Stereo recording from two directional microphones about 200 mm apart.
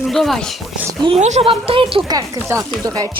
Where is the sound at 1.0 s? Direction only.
30° right (ahead or behind).